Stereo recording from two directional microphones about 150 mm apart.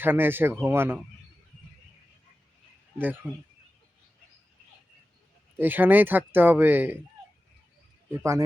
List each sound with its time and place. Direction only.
0.0 s speech: 15° right (ahead or behind)
3.2 s speech: 10° left (ahead or behind)
5.5 s speech: 15° right (ahead or behind)
8.2 s speech: 20° right (ahead or behind)